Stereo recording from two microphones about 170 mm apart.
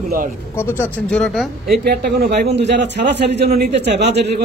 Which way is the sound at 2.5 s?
90° right.